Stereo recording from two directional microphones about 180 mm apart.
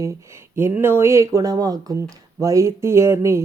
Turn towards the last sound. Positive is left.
turn(degrees=-15)  # may be behind; listen again after turning